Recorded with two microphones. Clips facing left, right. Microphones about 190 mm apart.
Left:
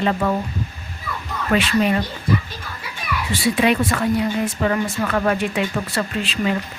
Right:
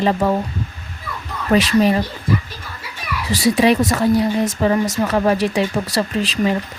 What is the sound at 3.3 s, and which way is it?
Speech, 40° right (ahead or behind).